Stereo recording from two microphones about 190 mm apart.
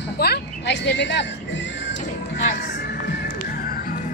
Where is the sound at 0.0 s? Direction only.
60° left (ahead or behind).